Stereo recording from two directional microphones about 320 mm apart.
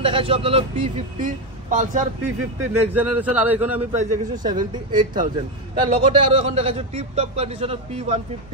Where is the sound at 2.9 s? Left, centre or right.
Centre.